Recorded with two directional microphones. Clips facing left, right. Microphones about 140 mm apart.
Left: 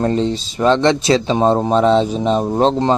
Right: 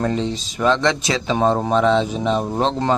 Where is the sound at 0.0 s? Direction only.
35° left (ahead or behind).